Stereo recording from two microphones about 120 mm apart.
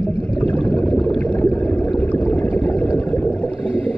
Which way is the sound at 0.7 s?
10° left (ahead or behind).